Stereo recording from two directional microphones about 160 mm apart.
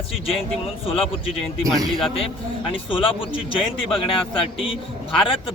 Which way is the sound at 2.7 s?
35° left (ahead or behind).